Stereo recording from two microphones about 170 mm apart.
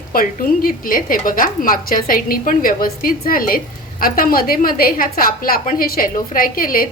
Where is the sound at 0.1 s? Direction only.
60° left (ahead or behind).